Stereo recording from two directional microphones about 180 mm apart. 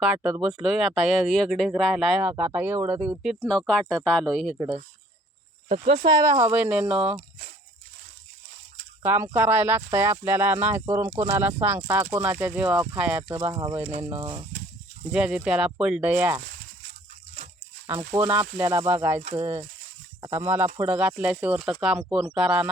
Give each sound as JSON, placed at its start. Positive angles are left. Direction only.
{"t": 0.0, "sound": "speech", "side_deg": -5}
{"t": 3.4, "sound": "speech", "side_deg": 5}
{"t": 5.6, "sound": "speech", "side_deg": -30}
{"t": 6.4, "sound": "speech", "side_deg": -10}
{"t": 9.0, "sound": "speech", "side_deg": -10}
{"t": 13.2, "sound": "speech", "side_deg": -25}
{"t": 14.0, "sound": "speech", "side_deg": -15}
{"t": 18.1, "sound": "speech", "side_deg": -10}
{"t": 19.2, "sound": "speech", "side_deg": -35}
{"t": 20.3, "sound": "speech", "side_deg": -10}